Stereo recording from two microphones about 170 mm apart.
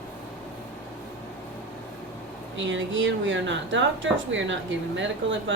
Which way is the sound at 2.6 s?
90° right.